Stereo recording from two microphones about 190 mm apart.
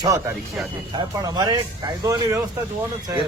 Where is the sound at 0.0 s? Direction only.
15° right (ahead or behind).